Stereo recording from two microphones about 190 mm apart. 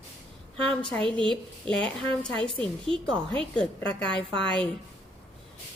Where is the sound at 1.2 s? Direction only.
25° right (ahead or behind).